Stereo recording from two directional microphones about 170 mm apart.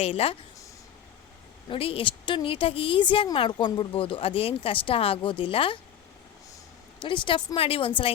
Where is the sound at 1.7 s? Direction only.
35° left (ahead or behind).